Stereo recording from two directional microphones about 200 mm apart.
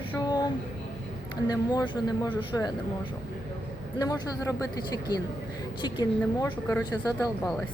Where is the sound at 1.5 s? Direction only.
20° left (ahead or behind).